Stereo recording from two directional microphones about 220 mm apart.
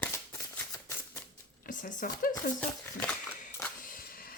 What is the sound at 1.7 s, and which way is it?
Speech, 35° left (ahead or behind).